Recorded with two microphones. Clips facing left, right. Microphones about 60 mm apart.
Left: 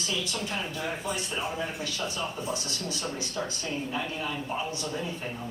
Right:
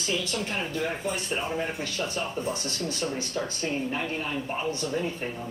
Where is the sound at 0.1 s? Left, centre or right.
Right.